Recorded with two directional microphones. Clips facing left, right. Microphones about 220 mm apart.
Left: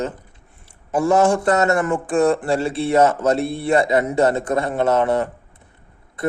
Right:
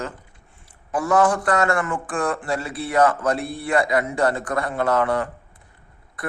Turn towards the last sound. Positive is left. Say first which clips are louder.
# left 9 dB
turn(degrees=25)  # may be behind; listen again after turning